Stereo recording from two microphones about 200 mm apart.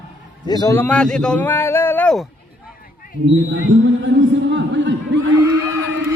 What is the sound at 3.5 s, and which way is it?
Speech, 65° right (ahead or behind).